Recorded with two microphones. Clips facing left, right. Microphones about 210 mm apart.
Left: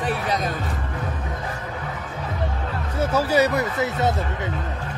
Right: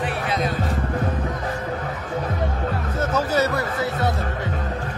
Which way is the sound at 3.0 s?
10° left (ahead or behind).